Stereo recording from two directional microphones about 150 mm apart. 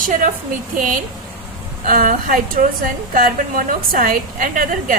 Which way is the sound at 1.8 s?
70° right (ahead or behind).